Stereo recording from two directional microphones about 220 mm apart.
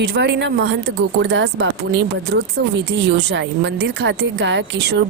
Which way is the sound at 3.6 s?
55° right (ahead or behind).